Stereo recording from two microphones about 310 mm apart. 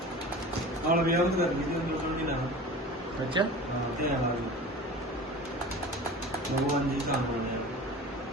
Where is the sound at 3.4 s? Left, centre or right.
Centre.